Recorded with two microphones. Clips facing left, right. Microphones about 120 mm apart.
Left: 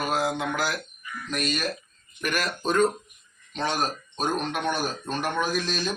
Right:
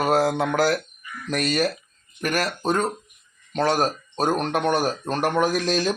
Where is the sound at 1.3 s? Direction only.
80° right.